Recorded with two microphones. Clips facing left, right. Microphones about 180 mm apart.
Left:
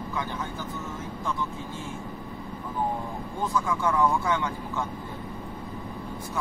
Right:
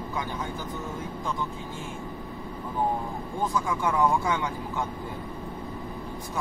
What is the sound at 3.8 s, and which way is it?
Speech, 15° right (ahead or behind).